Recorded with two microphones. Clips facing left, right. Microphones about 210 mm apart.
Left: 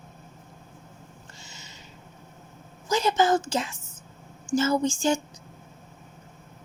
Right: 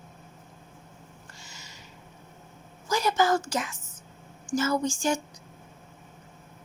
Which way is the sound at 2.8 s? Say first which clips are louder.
Left 2 dB; 20° left (ahead or behind).